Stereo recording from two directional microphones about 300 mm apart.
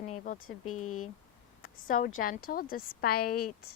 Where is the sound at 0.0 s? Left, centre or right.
Left.